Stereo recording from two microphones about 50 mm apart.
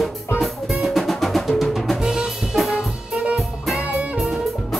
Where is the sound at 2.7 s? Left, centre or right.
Centre.